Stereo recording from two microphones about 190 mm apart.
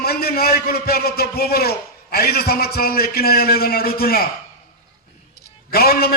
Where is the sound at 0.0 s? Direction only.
55° left (ahead or behind).